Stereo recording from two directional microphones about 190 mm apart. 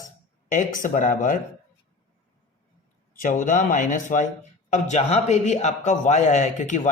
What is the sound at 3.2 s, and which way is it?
A man's voice, 40° left (ahead or behind).